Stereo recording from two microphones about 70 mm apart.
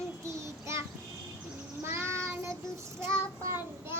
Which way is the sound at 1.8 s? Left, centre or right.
Right.